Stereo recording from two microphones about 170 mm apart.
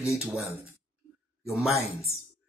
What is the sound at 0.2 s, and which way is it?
Speech, 15° left (ahead or behind).